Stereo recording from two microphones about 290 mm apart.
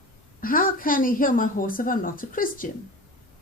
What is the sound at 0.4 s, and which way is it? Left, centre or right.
A woman's voice, left.